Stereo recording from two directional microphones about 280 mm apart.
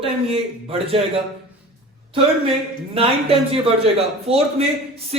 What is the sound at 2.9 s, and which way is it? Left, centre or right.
A man's voice, right.